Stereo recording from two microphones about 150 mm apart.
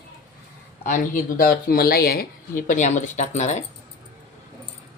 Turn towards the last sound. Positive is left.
turn(degrees=50)  # may be behind; listen again after turning